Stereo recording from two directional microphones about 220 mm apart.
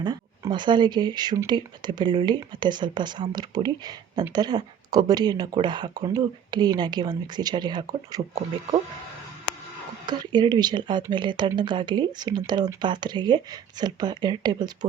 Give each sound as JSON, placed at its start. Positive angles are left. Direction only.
{"t": 0.0, "sound": "speech", "side_deg": -20}
{"t": 10.1, "sound": "speech", "side_deg": -20}